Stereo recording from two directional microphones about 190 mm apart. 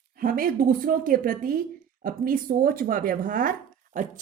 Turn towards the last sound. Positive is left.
turn(degrees=-45)  # may be behind; listen again after turning